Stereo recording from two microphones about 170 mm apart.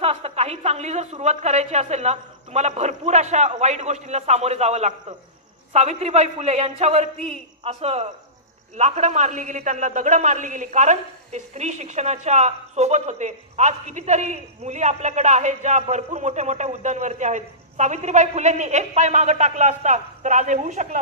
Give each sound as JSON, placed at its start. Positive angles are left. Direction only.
{"t": 0.0, "sound": "a man's voice", "side_deg": -35}